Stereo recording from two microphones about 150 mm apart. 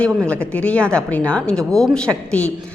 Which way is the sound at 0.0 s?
10° left (ahead or behind).